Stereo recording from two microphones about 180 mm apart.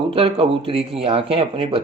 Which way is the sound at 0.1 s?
30° right (ahead or behind).